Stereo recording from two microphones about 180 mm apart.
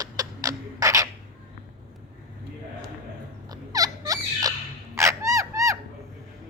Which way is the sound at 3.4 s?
20° right (ahead or behind).